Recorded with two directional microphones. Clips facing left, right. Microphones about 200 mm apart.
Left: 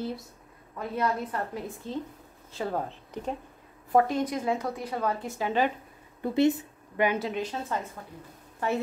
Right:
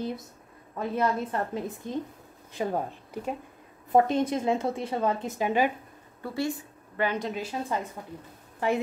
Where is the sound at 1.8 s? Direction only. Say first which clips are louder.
Right 2 dB; 15° right (ahead or behind).